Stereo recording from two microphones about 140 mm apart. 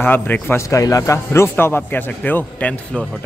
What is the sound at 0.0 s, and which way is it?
A man's voice, 15° left (ahead or behind).